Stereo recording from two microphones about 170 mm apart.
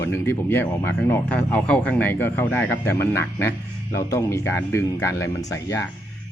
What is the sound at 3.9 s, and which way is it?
Speech, 15° left (ahead or behind).